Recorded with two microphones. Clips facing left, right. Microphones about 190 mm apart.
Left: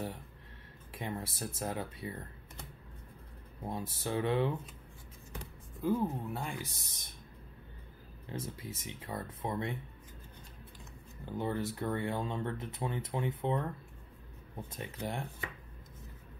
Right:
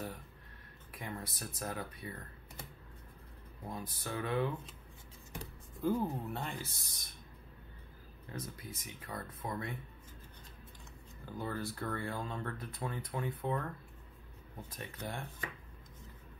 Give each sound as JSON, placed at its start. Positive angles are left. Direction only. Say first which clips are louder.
{"t": 0.9, "sound": "speech", "louder": "left 4 dB", "side_deg": 25}
{"t": 3.6, "sound": "speech", "louder": "left 5 dB", "side_deg": 25}
{"t": 5.8, "sound": "speech", "louder": "left 1 dB", "side_deg": 0}
{"t": 8.3, "sound": "speech", "louder": "left 4 dB", "side_deg": 25}
{"t": 11.2, "sound": "speech", "louder": "left 5 dB", "side_deg": 25}
{"t": 14.7, "sound": "speech", "louder": "left 4 dB", "side_deg": 25}